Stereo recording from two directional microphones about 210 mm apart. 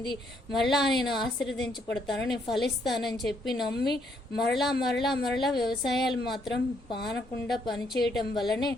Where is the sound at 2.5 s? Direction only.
Centre (ahead or behind).